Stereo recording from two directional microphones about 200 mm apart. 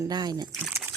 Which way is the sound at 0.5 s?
5° right (ahead or behind).